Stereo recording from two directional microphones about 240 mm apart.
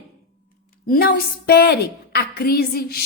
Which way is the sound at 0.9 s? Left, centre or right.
Left.